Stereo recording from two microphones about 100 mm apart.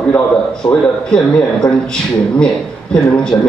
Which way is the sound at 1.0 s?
5° left (ahead or behind).